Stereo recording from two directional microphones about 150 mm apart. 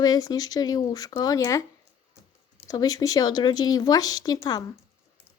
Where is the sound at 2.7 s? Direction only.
25° left (ahead or behind).